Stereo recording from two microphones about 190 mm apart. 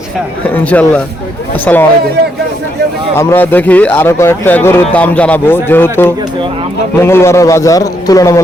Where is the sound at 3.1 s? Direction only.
10° left (ahead or behind).